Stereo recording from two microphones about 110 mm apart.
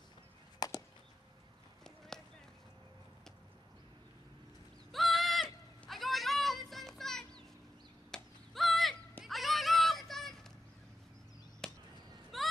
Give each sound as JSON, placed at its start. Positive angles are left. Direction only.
{"t": 0.6, "sound": "chop", "side_deg": 35}
{"t": 2.1, "sound": "run", "side_deg": 5}
{"t": 4.9, "sound": "a sound", "side_deg": 0}
{"t": 9.2, "sound": "children playing", "side_deg": 0}
{"t": 11.6, "sound": "chop", "side_deg": 5}
{"t": 12.3, "sound": "a sound", "side_deg": 0}